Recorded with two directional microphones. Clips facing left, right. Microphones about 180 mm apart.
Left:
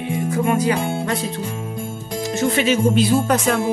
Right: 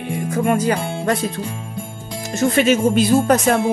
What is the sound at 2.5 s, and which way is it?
Speech, 50° right (ahead or behind).